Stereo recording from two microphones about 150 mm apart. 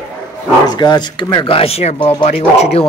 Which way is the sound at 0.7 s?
30° left (ahead or behind).